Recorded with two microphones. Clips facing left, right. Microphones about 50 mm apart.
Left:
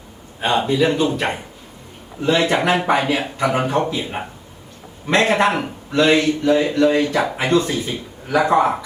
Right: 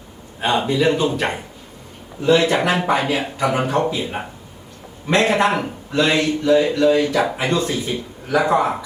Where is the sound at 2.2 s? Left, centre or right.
Left.